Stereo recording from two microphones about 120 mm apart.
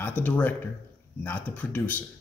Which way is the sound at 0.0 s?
15° left (ahead or behind).